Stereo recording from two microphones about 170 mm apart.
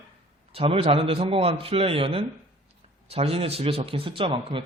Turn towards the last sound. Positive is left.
turn(degrees=-30)  # may be behind; listen again after turning